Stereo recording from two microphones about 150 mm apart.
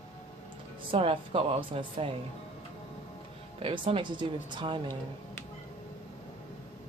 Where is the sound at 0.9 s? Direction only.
35° right (ahead or behind).